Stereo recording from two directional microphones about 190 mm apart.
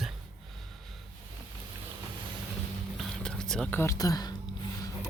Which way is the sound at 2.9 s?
5° left (ahead or behind).